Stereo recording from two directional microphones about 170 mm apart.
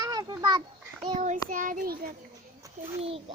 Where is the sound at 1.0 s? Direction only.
40° right (ahead or behind).